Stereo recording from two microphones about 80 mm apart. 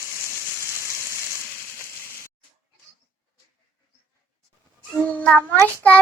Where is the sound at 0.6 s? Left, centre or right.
Right.